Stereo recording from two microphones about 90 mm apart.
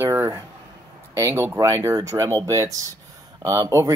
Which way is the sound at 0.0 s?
30° right (ahead or behind).